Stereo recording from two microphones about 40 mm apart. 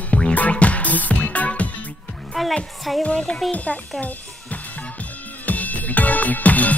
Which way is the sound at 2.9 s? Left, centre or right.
Centre.